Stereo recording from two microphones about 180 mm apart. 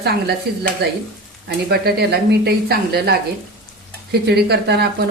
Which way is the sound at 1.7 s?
65° right (ahead or behind).